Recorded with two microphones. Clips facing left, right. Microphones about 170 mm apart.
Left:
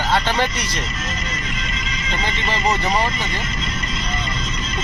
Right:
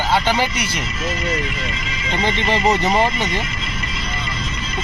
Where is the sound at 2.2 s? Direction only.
20° right (ahead or behind).